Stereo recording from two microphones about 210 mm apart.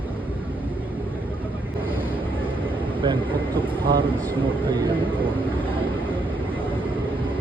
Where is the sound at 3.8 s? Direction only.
25° right (ahead or behind).